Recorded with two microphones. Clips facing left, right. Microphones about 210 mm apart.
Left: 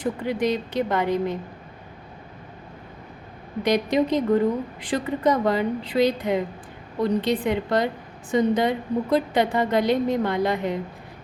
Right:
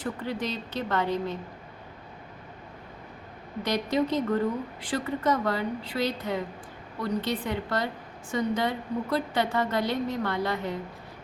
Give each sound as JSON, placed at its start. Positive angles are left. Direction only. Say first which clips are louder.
{"t": 0.0, "sound": "a woman's voice", "louder": "left 7 dB", "side_deg": 15}
{"t": 3.6, "sound": "a woman's voice", "louder": "left 5 dB", "side_deg": 15}